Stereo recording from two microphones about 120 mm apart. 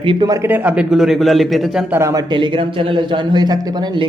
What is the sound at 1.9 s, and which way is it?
Speech, 25° right (ahead or behind).